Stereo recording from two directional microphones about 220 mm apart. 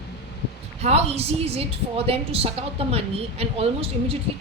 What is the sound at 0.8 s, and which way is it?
A woman's voice, 30° right (ahead or behind).